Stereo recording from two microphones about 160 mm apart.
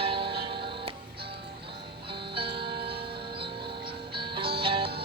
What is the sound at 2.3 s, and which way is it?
Music, 35° right (ahead or behind).